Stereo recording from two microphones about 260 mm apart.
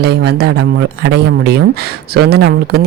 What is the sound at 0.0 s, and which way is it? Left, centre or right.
Speech, right.